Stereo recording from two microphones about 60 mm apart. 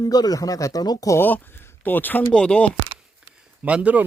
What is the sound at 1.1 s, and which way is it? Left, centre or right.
Speech, left.